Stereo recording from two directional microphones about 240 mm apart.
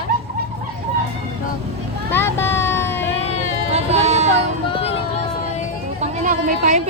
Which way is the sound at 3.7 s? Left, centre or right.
Right.